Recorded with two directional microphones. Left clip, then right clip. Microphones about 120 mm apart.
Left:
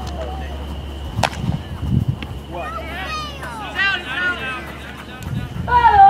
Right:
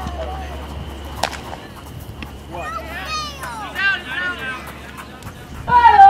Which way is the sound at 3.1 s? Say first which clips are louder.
Right 1 dB; 35° right (ahead or behind).